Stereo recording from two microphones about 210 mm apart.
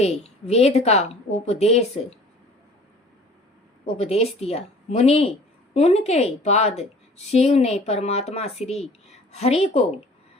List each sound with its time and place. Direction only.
0.0 s a woman's voice: 30° left (ahead or behind)
3.9 s a woman's voice: 30° left (ahead or behind)